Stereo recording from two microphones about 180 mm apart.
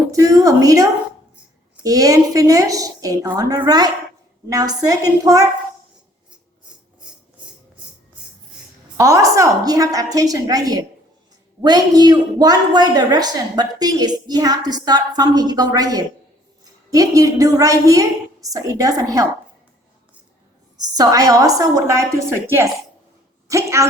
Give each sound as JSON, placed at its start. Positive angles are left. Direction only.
{"t": 0.1, "sound": "a woman's voice", "side_deg": -20}
{"t": 9.0, "sound": "a woman's voice", "side_deg": -15}
{"t": 20.8, "sound": "a woman's voice", "side_deg": -20}